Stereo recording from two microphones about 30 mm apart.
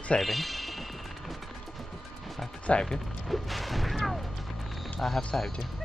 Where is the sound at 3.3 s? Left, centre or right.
Centre.